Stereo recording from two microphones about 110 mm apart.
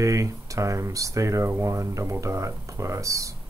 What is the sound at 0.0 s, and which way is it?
Speech, 30° right (ahead or behind).